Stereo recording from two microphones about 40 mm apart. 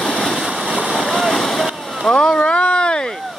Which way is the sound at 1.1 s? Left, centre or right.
Centre.